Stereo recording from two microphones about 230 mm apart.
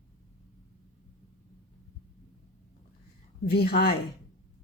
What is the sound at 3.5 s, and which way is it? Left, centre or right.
Speech, left.